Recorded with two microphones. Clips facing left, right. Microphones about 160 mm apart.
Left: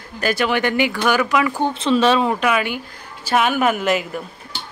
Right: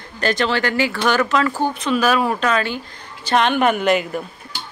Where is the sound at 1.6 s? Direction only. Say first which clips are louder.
Left 2 dB; 30° left (ahead or behind).